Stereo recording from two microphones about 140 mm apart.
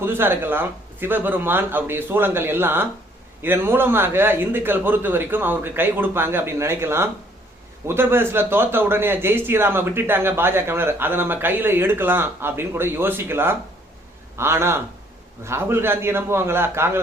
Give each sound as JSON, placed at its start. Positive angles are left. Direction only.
{"t": 0.0, "sound": "speech", "side_deg": -15}